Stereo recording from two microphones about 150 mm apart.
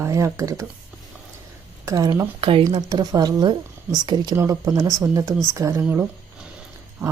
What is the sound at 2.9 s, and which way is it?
Speech, 25° right (ahead or behind).